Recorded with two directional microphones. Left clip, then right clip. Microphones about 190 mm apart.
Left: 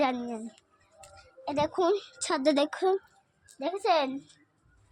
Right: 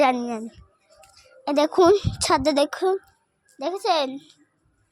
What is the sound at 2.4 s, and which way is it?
A child's voice, 35° right (ahead or behind).